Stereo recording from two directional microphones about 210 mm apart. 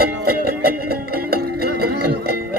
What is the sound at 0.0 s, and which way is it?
Music, 45° right (ahead or behind).